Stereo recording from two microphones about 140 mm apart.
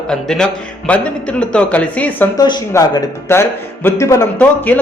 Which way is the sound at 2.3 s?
30° left (ahead or behind).